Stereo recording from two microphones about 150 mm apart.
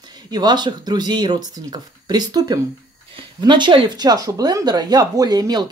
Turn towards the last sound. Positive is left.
turn(degrees=-25)  # may be behind; listen again after turning